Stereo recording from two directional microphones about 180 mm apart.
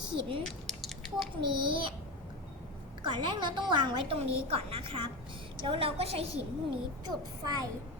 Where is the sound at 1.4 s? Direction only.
25° right (ahead or behind).